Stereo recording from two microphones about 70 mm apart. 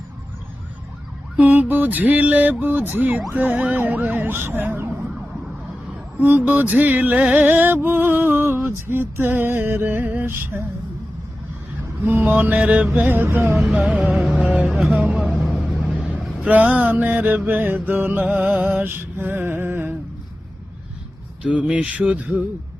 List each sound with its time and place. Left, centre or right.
1.4 s music: right
6.1 s music: right
12.0 s music: right
13.6 s music: centre
15.4 s vehicle: centre
16.4 s vehicle: right
16.7 s music: right
18.6 s mantra: right
21.4 s music: centre